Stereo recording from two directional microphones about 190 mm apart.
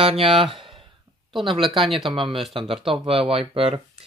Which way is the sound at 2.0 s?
25° right (ahead or behind).